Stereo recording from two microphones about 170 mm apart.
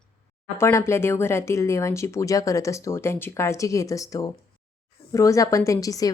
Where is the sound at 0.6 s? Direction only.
15° left (ahead or behind).